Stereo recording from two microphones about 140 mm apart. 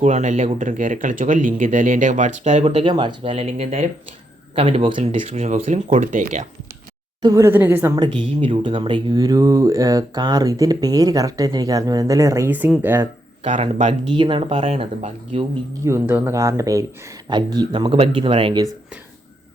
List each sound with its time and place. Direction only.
0.0 s speech: 55° right (ahead or behind)
2.6 s speech: 40° right (ahead or behind)
3.3 s speech: 50° right (ahead or behind)
5.2 s speech: 55° right (ahead or behind)
7.2 s speech: 25° right (ahead or behind)
7.9 s speech: 35° right (ahead or behind); by 13.1 s 15° right (ahead or behind)
13.4 s speech: 55° right (ahead or behind)
14.1 s speech: 35° right (ahead or behind)
15.8 s speech: 15° right (ahead or behind); by 18.6 s 40° right (ahead or behind)